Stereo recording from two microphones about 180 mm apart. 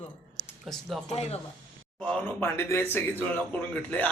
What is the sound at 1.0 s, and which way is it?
Speech, 35° left (ahead or behind).